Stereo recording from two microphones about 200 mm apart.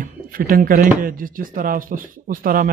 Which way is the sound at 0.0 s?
45° right (ahead or behind).